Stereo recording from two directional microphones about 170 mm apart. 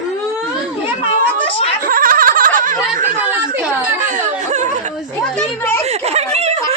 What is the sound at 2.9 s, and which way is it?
Speech, 50° right (ahead or behind).